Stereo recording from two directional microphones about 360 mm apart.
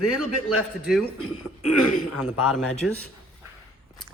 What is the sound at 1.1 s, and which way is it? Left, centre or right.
Speech, left.